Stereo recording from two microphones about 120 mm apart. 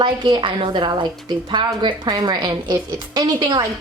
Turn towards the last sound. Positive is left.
turn(degrees=-35)  # may be behind; listen again after turning